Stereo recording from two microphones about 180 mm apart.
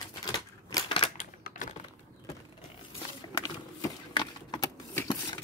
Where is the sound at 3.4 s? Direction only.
20° left (ahead or behind).